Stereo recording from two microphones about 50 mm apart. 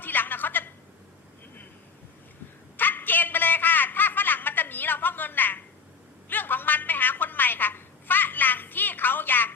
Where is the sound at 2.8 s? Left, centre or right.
Left.